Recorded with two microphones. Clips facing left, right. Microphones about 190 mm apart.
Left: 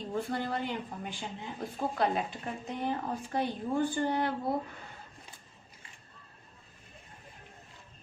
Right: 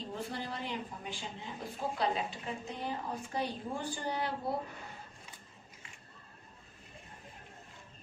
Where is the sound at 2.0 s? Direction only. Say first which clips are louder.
Left 3 dB; 55° left (ahead or behind).